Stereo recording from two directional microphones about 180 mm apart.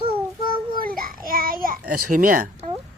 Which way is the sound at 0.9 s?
55° right (ahead or behind).